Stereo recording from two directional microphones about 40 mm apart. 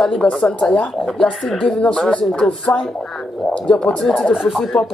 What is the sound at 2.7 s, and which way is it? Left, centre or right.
Speech, left.